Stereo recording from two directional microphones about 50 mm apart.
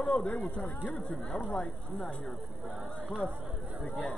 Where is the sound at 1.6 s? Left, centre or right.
Left.